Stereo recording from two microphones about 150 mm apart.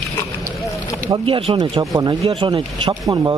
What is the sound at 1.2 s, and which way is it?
Speech, 35° right (ahead or behind).